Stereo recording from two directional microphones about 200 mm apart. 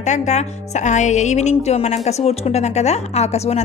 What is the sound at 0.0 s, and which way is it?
A woman's voice, 35° left (ahead or behind).